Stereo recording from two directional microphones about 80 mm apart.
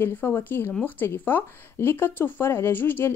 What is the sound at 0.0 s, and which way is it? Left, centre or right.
Speech, left.